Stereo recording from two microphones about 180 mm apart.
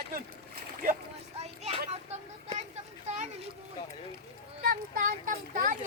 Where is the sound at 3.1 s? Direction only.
40° right (ahead or behind).